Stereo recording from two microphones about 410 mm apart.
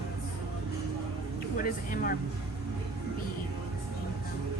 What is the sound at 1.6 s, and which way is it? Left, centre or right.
Speech, centre.